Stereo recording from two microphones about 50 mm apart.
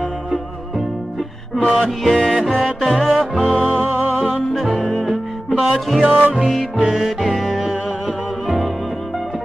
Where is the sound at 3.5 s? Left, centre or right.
Right.